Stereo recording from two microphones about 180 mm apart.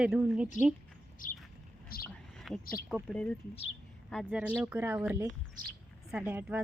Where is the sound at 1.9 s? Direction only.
55° left (ahead or behind).